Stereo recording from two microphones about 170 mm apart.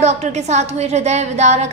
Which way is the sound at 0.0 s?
40° right (ahead or behind).